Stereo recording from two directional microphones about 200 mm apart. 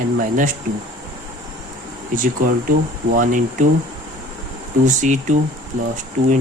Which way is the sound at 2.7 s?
45° right (ahead or behind).